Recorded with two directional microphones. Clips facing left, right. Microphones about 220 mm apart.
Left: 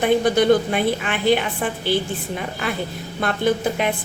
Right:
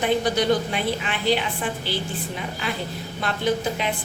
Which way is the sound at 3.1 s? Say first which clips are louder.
Left 4 dB; 55° left (ahead or behind).